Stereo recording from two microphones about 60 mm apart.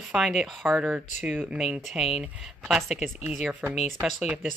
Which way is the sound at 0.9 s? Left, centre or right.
Right.